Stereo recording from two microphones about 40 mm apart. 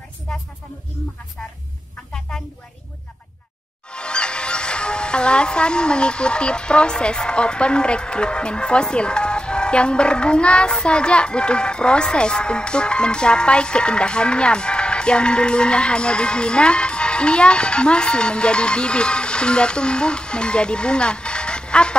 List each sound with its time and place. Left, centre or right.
3.9 s speech: left